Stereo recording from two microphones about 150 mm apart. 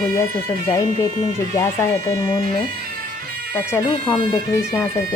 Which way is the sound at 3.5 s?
15° left (ahead or behind).